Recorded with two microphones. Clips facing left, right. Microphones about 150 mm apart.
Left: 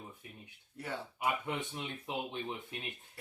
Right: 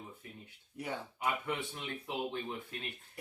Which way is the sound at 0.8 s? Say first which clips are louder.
Right 3 dB; 15° right (ahead or behind).